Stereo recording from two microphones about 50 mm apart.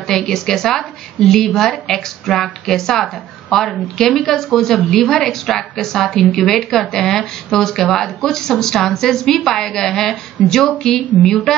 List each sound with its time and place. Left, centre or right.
0.1 s a woman's voice: centre